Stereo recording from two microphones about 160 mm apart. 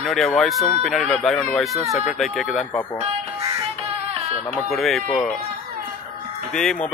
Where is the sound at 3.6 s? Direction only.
40° right (ahead or behind).